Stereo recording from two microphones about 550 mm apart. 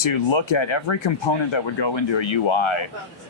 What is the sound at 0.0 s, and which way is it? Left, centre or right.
Speech, left.